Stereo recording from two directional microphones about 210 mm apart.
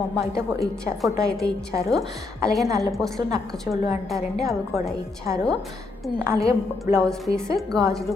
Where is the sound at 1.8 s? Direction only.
Centre (ahead or behind).